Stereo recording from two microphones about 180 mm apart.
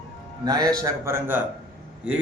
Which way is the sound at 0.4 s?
20° right (ahead or behind).